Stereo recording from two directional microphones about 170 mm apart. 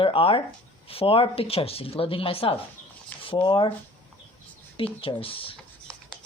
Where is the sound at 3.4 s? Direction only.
25° left (ahead or behind).